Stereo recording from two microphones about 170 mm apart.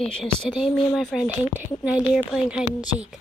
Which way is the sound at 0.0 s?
5° left (ahead or behind).